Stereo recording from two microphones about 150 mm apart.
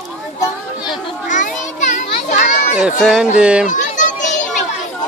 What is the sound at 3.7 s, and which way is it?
Children playing, 55° left (ahead or behind).